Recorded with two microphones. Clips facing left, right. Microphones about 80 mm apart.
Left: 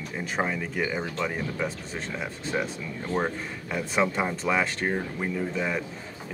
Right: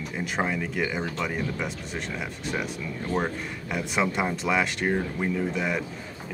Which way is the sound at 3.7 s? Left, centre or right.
Centre.